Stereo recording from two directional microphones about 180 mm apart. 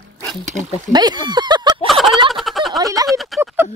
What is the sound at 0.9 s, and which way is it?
Speech, 25° right (ahead or behind).